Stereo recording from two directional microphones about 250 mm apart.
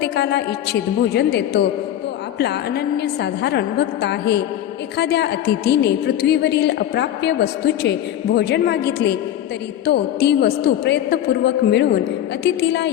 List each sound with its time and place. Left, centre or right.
0.0 s a woman's voice: left